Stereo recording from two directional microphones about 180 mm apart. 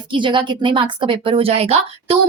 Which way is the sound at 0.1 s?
25° right (ahead or behind).